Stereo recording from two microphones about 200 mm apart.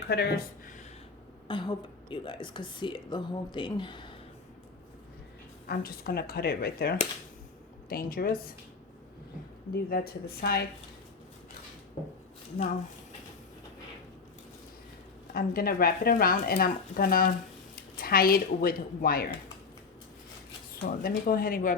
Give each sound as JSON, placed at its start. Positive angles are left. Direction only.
{"t": 0.1, "sound": "speech", "side_deg": 50}
{"t": 1.5, "sound": "speech", "side_deg": 25}
{"t": 5.6, "sound": "speech", "side_deg": 50}
{"t": 9.9, "sound": "speech", "side_deg": 50}
{"t": 15.3, "sound": "speech", "side_deg": 50}
{"t": 20.8, "sound": "speech", "side_deg": 50}